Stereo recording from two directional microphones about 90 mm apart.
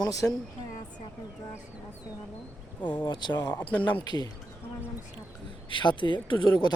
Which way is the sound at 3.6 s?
15° left (ahead or behind).